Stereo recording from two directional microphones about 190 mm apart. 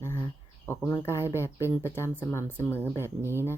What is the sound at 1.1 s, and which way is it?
Speech, 15° right (ahead or behind).